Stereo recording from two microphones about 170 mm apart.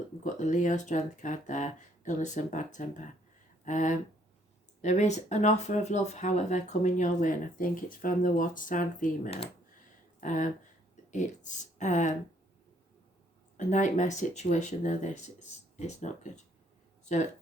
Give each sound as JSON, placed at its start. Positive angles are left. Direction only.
{"t": 0.3, "sound": "speech", "side_deg": 45}
{"t": 13.6, "sound": "speech", "side_deg": 45}